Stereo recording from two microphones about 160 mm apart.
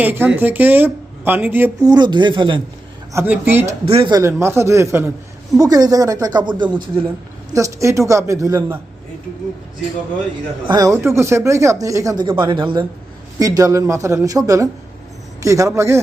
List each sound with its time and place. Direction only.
0.0 s speech: 10° right (ahead or behind)
1.9 s speech: 25° right (ahead or behind)
3.1 s speech: 15° right (ahead or behind)
3.8 s speech: 35° right (ahead or behind)
4.2 s speech: 15° right (ahead or behind)
10.7 s speech: 20° right (ahead or behind)